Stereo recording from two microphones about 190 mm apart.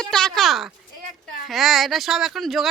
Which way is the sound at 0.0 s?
5° left (ahead or behind).